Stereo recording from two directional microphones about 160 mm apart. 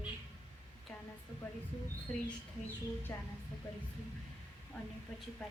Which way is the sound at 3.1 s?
15° left (ahead or behind).